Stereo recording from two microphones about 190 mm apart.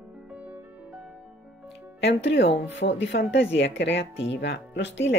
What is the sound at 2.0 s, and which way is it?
Speech, 70° left (ahead or behind).